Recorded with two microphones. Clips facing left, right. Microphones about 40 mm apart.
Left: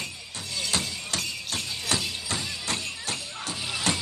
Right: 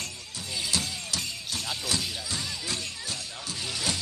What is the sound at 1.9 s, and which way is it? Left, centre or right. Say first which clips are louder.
Music: left 5 dB; left.